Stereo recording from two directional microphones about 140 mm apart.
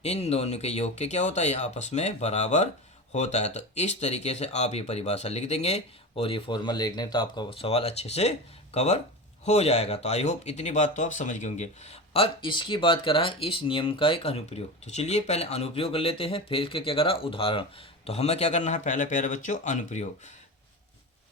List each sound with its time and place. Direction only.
0.0 s speech: 50° left (ahead or behind)